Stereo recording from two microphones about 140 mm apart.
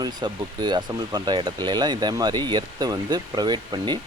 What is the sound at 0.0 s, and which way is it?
Speech, 30° right (ahead or behind).